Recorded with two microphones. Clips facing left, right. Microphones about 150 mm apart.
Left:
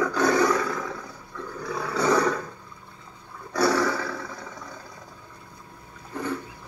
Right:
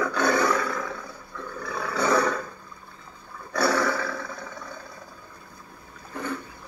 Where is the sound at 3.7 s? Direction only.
35° left (ahead or behind).